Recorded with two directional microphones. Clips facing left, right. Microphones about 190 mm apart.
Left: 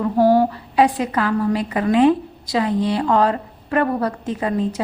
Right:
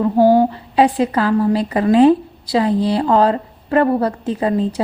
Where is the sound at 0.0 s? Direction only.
25° right (ahead or behind).